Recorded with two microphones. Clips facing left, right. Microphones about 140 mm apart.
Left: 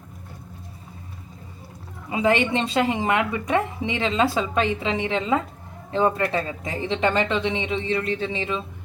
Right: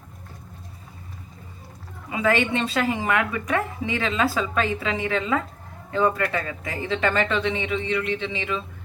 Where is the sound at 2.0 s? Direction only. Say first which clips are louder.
Left 1 dB; 25° left (ahead or behind).